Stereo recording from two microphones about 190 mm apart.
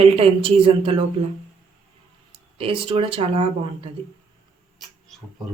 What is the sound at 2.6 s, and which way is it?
A woman's voice, 30° right (ahead or behind).